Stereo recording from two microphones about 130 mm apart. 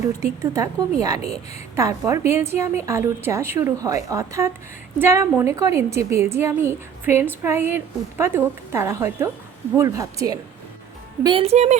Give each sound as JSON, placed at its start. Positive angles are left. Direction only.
{"t": 0.2, "sound": "a woman's voice", "side_deg": -25}
{"t": 11.4, "sound": "speech", "side_deg": -55}